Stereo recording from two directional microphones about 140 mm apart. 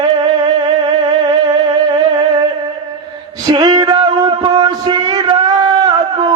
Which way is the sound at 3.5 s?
30° right (ahead or behind).